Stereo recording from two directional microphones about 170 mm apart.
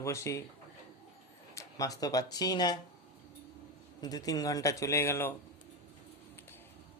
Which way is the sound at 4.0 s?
20° left (ahead or behind).